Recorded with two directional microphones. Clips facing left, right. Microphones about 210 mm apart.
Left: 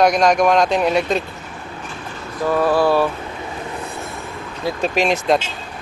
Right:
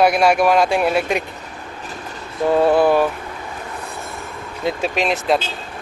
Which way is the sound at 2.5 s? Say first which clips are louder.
Right 2 dB; 25° right (ahead or behind).